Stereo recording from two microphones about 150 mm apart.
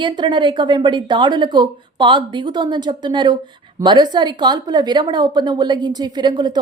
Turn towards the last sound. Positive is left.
turn(degrees=-30)  # may be behind; listen again after turning